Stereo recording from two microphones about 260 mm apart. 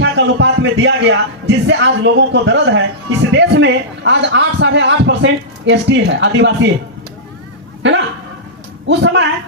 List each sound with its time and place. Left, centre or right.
0.0 s a man's voice: right
7.8 s a sound: right
8.9 s a man's voice: right